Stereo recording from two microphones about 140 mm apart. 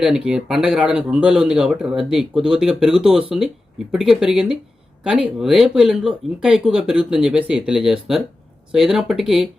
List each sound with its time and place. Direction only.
0.0 s speech: 5° right (ahead or behind)